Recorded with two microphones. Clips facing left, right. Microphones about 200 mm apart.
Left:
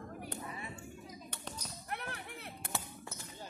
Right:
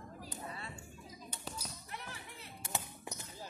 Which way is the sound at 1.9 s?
60° left (ahead or behind).